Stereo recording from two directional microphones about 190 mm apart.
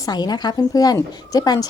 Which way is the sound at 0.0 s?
20° left (ahead or behind).